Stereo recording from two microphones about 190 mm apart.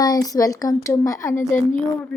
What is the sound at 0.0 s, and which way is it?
A woman's voice, 20° left (ahead or behind).